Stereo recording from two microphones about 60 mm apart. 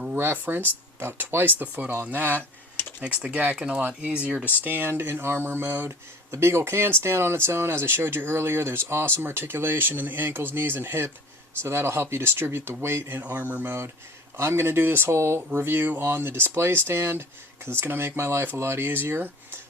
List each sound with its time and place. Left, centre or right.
0.2 s speech: right
3.0 s speech: centre
4.4 s speech: right
13.2 s speech: right